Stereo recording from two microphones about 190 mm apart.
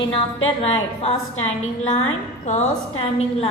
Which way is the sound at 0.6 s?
30° left (ahead or behind).